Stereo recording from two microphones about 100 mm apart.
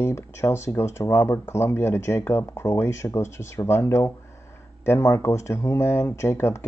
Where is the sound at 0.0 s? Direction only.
25° left (ahead or behind).